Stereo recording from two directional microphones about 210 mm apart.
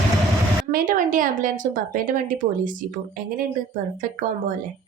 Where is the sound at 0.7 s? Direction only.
40° right (ahead or behind).